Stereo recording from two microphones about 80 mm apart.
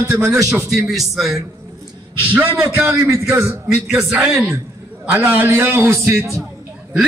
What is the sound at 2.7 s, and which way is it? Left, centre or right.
Speech, right.